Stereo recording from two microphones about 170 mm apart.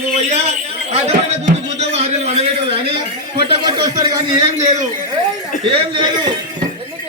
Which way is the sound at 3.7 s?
25° right (ahead or behind).